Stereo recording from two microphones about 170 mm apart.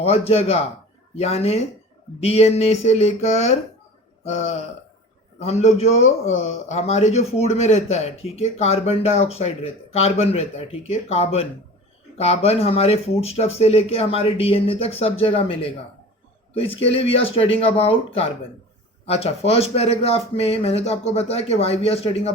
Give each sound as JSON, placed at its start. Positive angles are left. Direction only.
{"t": 0.0, "sound": "a man's voice", "side_deg": 35}